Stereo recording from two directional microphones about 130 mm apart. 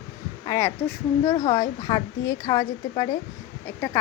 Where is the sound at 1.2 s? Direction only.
50° left (ahead or behind).